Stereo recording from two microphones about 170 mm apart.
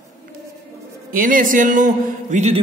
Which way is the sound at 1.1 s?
55° right (ahead or behind).